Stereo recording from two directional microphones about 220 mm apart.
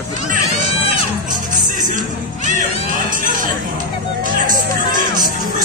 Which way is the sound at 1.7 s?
35° right (ahead or behind).